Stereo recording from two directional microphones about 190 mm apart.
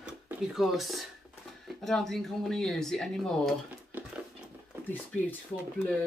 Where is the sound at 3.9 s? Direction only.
10° right (ahead or behind).